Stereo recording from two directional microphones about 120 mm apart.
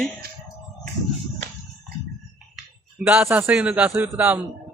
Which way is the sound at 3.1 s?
20° right (ahead or behind).